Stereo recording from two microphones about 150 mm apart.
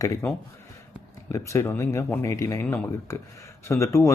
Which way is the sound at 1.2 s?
20° left (ahead or behind).